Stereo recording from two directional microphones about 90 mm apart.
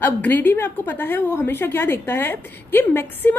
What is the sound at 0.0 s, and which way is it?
A woman's voice, 20° left (ahead or behind).